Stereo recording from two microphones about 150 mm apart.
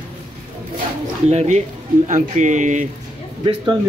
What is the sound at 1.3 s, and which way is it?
Speech, 50° right (ahead or behind).